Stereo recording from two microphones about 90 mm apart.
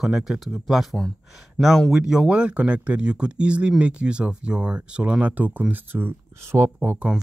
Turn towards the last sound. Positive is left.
turn(degrees=-25)  # may be behind; listen again after turning